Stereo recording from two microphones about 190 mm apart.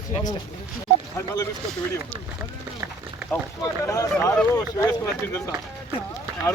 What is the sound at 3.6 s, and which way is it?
Speech, 15° left (ahead or behind).